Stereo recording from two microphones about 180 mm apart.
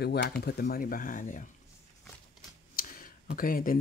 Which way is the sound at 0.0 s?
65° left (ahead or behind).